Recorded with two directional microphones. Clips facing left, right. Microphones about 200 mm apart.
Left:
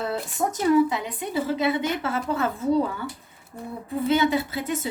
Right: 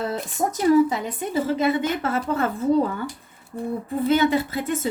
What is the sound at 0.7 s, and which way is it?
A woman's voice, 45° right (ahead or behind).